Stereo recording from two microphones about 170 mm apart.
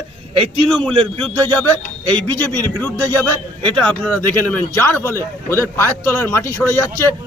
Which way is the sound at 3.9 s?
10° left (ahead or behind).